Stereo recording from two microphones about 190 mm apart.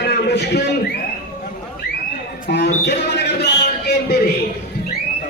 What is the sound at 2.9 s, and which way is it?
Music, 65° left (ahead or behind).